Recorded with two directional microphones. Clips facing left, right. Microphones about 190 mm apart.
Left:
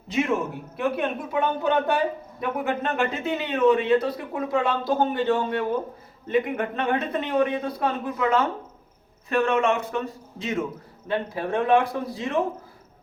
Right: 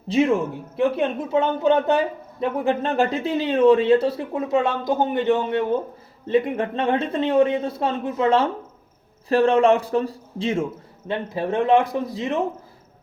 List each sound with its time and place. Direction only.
0.8 s a man's voice: 25° right (ahead or behind)